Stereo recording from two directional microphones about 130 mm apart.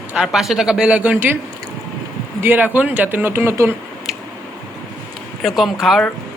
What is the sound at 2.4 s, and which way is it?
Speech, 15° right (ahead or behind).